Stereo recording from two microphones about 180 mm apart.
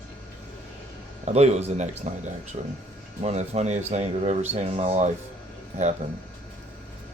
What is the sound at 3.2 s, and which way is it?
Speech, 40° right (ahead or behind).